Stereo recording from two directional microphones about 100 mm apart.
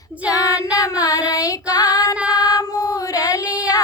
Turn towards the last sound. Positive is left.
turn(degrees=35)  # may be behind; listen again after turning